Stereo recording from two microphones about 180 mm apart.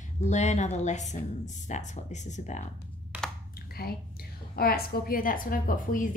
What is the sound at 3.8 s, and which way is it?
A woman's voice, 55° left (ahead or behind).